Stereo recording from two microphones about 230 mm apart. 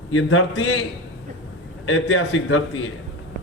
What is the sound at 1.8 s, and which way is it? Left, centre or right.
Speech, left.